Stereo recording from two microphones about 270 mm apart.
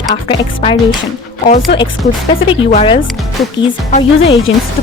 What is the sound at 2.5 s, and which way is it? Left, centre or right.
Speech, left.